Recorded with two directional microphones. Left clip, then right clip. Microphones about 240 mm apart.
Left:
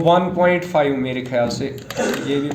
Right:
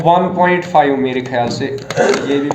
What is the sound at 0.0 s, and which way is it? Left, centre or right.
Speech, left.